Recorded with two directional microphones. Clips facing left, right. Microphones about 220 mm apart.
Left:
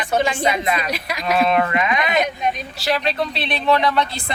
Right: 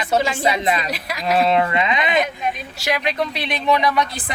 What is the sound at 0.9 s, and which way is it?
Speech, centre (ahead or behind).